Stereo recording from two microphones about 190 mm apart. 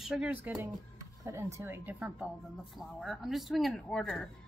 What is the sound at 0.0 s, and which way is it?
A woman's voice, 5° right (ahead or behind).